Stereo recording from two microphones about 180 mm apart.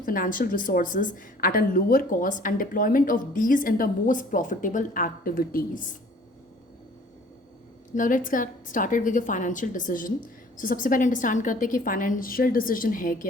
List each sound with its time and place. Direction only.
0.0 s a woman's voice: 50° left (ahead or behind)
7.9 s a woman's voice: 50° left (ahead or behind)